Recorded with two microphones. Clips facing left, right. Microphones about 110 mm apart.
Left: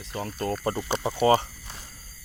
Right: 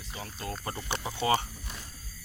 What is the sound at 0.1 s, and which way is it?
Speech, 50° left (ahead or behind).